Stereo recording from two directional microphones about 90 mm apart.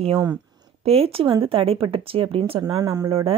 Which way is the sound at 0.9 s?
90° right.